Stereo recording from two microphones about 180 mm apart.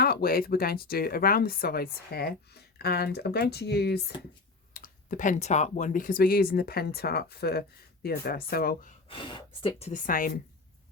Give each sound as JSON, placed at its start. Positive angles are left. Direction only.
{"t": 0.0, "sound": "speech", "side_deg": 60}
{"t": 4.7, "sound": "speech", "side_deg": 50}
{"t": 9.0, "sound": "speech", "side_deg": 30}